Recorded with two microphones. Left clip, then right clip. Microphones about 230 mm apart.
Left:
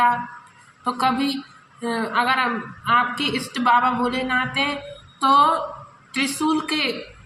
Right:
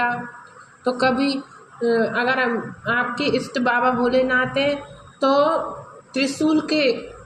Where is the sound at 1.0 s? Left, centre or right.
Left.